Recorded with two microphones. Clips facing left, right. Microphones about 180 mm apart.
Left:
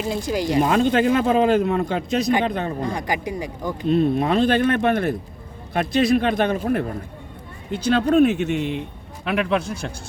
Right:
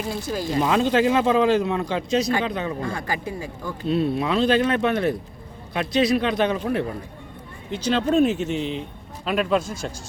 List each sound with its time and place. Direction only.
0.1 s speech: 15° left (ahead or behind)
0.6 s a man's voice: 55° left (ahead or behind)
2.8 s speech: 15° left (ahead or behind)
3.8 s a man's voice: 50° left (ahead or behind)